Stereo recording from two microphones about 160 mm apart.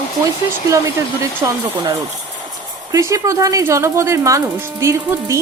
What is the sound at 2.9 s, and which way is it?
Speech, 20° right (ahead or behind).